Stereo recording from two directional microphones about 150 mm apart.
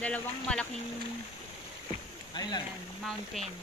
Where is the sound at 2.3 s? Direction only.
30° left (ahead or behind).